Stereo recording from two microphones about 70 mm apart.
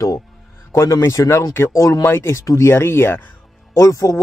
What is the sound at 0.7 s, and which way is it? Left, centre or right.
Speech, left.